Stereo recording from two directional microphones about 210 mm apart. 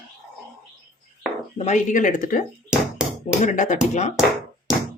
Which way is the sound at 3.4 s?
35° left (ahead or behind).